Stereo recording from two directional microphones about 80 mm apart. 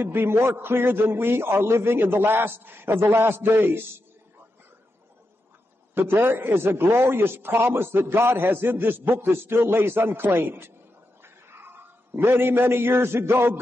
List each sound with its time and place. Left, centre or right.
0.0 s a man's voice: right
6.2 s a man's voice: right